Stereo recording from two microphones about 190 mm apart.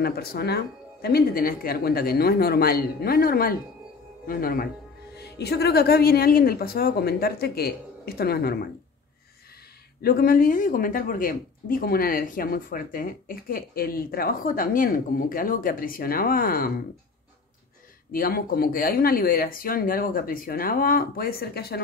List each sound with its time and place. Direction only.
0.0 s a woman's voice: 55° left (ahead or behind)
10.0 s speech: 50° left (ahead or behind)
18.1 s speech: 50° left (ahead or behind)